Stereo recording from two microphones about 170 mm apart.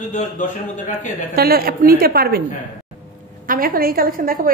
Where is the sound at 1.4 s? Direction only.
65° right (ahead or behind).